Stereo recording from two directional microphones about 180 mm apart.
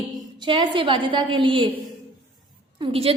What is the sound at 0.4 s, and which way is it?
A woman's voice, 25° right (ahead or behind).